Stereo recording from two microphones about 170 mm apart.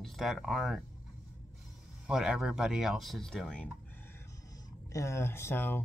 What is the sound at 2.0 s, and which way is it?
Speech, 5° right (ahead or behind).